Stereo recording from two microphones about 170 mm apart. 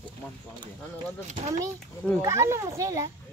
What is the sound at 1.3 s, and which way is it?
Speech, 45° right (ahead or behind).